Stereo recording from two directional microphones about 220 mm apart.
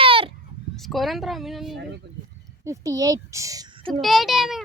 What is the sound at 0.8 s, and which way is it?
Speech, centre (ahead or behind).